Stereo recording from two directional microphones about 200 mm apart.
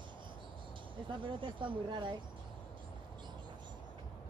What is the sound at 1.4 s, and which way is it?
Speech, 25° right (ahead or behind).